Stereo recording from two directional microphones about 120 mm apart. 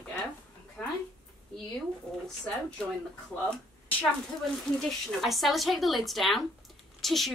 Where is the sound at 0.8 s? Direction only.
5° left (ahead or behind).